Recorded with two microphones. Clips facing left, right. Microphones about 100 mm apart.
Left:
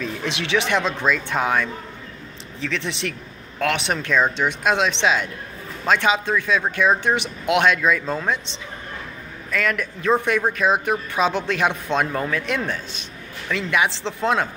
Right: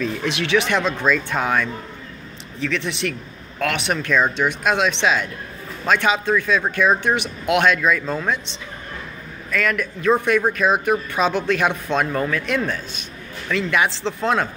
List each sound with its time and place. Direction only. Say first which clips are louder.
0.0 s a man's voice: right 3 dB; 25° left (ahead or behind)
9.5 s a man's voice: right 1 dB; 25° left (ahead or behind)